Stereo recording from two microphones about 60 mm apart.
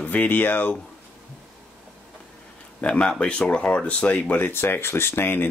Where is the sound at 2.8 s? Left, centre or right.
Centre.